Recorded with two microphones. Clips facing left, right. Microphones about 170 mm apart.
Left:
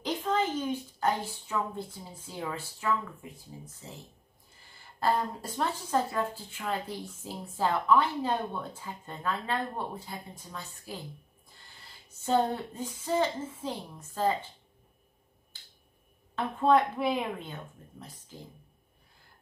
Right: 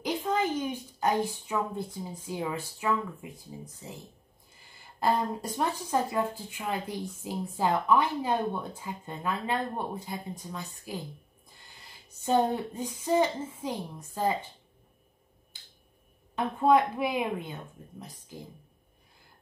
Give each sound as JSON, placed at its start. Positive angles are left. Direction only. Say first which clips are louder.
{"t": 0.0, "sound": "speech", "louder": "right 1 dB", "side_deg": -15}
{"t": 5.0, "sound": "a woman's voice", "louder": "right 1 dB", "side_deg": -15}
{"t": 12.2, "sound": "a woman's voice", "louder": "right 2 dB", "side_deg": -15}
{"t": 15.5, "sound": "finger snapping", "louder": "right 1 dB", "side_deg": -15}
{"t": 16.3, "sound": "a woman's voice", "louder": "right 1 dB", "side_deg": -15}